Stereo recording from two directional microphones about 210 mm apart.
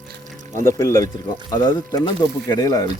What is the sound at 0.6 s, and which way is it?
Speech, 15° left (ahead or behind).